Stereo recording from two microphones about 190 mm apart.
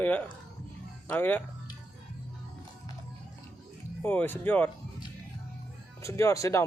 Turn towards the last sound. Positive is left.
turn(degrees=15)  # may be behind; listen again after turning